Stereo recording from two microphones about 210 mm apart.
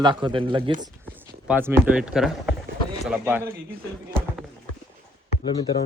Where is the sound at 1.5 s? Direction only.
10° right (ahead or behind).